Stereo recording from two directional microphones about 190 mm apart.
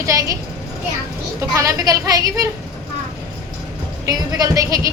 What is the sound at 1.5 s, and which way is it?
Speech, 20° right (ahead or behind).